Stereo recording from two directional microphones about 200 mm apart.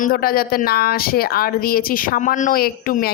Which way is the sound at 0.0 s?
45° left (ahead or behind).